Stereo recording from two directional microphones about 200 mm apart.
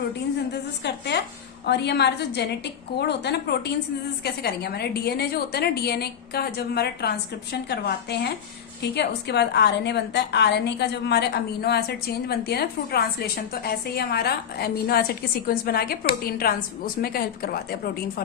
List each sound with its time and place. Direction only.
1.6 s a woman's voice: 55° left (ahead or behind)